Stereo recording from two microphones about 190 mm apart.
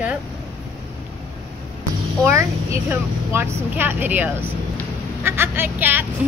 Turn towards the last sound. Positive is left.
turn(degrees=-10)  # may be behind; listen again after turning